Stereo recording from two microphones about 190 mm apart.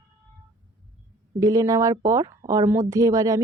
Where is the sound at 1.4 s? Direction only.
20° right (ahead or behind).